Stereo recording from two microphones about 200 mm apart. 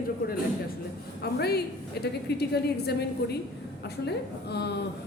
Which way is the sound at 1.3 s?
55° left (ahead or behind).